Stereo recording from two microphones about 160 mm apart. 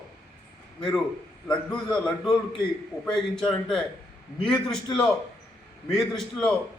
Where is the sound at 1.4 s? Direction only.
5° left (ahead or behind).